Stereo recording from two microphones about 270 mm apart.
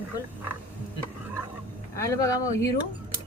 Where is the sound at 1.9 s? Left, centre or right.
Centre.